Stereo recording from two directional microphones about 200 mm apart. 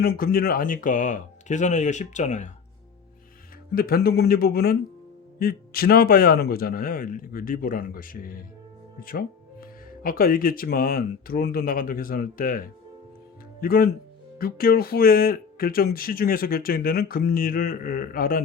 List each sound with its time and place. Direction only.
0.0 s speech: 50° left (ahead or behind)
3.8 s speech: 50° left (ahead or behind)